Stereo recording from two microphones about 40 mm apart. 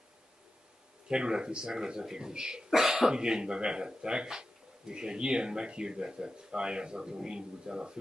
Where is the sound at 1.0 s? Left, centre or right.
Right.